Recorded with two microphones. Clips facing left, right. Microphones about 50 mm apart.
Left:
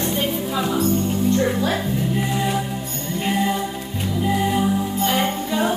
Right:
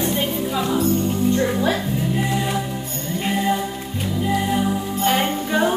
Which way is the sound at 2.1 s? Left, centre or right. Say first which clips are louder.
Even; centre.